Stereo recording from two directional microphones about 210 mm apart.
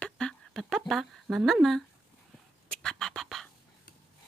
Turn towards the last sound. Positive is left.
turn(degrees=0)  # may be behind; listen again after turning